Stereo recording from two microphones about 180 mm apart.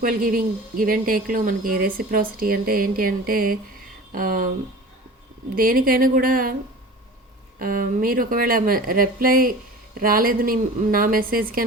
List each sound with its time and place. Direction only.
0.0 s speech: 50° right (ahead or behind)
5.5 s speech: 55° right (ahead or behind)
7.6 s speech: 50° right (ahead or behind)